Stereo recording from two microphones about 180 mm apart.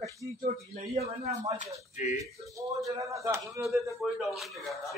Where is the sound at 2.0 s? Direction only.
40° left (ahead or behind).